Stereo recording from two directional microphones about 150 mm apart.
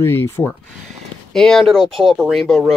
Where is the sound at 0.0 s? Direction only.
15° left (ahead or behind).